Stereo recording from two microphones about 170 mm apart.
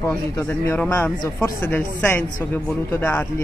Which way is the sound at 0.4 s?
10° left (ahead or behind).